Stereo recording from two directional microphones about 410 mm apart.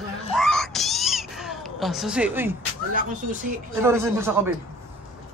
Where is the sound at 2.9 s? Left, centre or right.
Centre.